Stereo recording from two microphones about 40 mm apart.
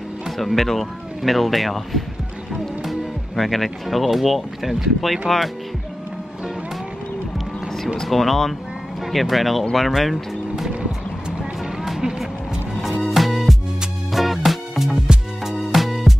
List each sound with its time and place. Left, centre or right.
0.4 s speech: centre
8.1 s speech: centre
10.8 s music: centre
11.8 s a sound: centre
13.0 s music: centre